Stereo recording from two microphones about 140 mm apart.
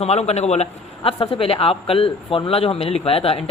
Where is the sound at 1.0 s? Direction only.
40° left (ahead or behind).